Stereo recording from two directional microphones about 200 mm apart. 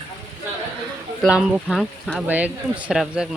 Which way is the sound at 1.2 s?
Centre (ahead or behind).